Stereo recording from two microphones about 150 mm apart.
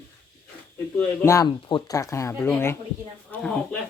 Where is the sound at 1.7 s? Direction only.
30° left (ahead or behind).